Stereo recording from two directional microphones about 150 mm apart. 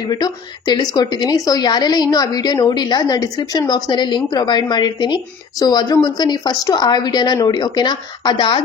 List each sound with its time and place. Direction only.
0.0 s a woman's voice: 25° left (ahead or behind)